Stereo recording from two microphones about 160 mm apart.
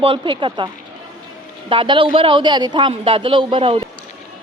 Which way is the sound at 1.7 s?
35° right (ahead or behind).